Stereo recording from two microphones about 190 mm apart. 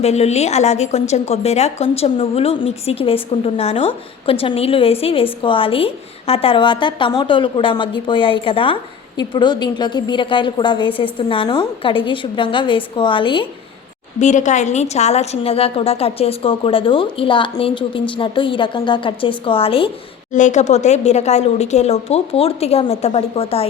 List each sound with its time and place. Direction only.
0.0 s a woman's voice: 35° left (ahead or behind)
14.2 s a woman's voice: 40° left (ahead or behind)
20.3 s speech: 40° left (ahead or behind)